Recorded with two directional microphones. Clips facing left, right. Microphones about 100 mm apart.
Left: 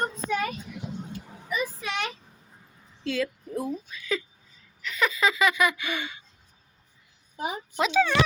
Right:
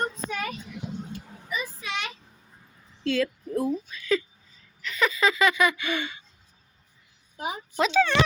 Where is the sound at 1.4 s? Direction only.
55° left (ahead or behind).